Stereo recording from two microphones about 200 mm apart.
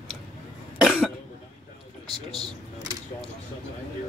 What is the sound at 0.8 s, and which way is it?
Cough, 5° right (ahead or behind).